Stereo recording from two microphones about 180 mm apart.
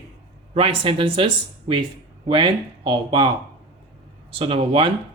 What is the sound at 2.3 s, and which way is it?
Speech, 25° right (ahead or behind).